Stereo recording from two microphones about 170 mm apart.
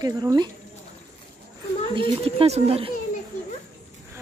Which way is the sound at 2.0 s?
35° right (ahead or behind).